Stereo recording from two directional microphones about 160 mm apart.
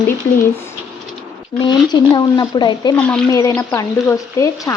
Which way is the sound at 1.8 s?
30° left (ahead or behind).